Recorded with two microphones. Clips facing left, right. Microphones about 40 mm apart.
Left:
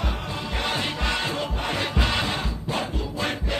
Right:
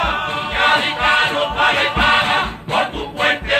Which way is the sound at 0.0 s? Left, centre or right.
Right.